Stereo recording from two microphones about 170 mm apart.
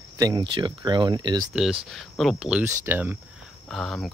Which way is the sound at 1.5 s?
Centre (ahead or behind).